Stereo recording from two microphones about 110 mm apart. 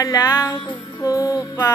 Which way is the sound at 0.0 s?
30° left (ahead or behind).